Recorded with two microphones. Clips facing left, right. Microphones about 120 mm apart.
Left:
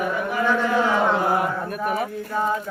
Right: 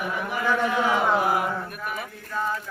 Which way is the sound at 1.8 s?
40° left (ahead or behind).